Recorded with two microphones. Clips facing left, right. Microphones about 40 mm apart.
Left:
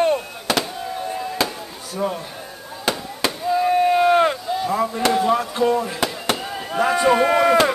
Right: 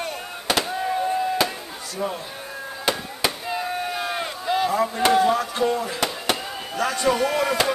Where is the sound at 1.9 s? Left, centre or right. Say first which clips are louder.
Left 4 dB; centre.